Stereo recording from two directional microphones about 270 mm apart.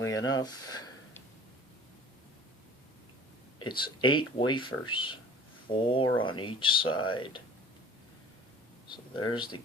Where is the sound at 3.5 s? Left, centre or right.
Centre.